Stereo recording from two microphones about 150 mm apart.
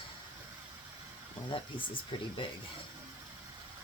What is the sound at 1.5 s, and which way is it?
Speech, 35° left (ahead or behind).